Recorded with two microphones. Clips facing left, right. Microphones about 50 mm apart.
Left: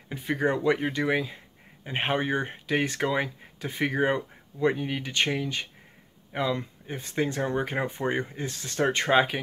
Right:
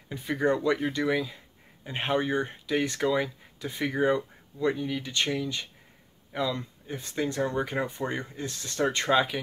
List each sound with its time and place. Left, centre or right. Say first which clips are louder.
0.1 s speech: even; left